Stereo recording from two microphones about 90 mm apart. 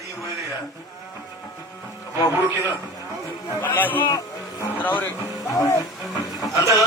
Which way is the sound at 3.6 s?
20° left (ahead or behind).